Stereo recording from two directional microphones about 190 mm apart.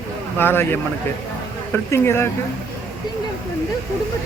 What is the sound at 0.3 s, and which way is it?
Speech, 10° left (ahead or behind).